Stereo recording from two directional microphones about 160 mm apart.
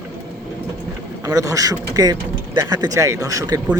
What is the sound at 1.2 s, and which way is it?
Speech, 20° right (ahead or behind).